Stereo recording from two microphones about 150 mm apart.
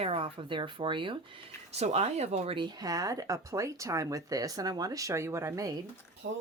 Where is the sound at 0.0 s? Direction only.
40° right (ahead or behind).